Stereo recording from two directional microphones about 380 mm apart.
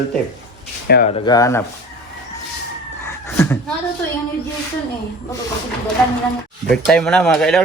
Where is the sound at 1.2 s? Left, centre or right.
Centre.